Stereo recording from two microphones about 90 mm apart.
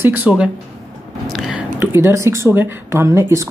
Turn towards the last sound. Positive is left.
turn(degrees=-30)  # may be behind; listen again after turning